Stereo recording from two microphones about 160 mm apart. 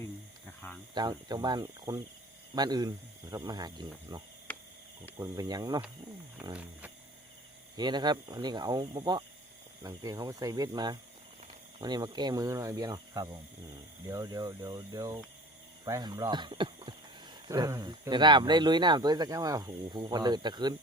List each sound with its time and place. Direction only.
0.6 s cricket: 10° left (ahead or behind)
0.9 s speech: 25° right (ahead or behind)
4.5 s a sound: 10° left (ahead or behind)
5.1 s speech: 20° right (ahead or behind)
7.8 s speech: 25° right (ahead or behind)